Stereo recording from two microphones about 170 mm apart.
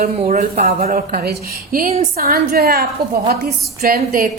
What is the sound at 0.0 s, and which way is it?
A woman's voice, 50° right (ahead or behind).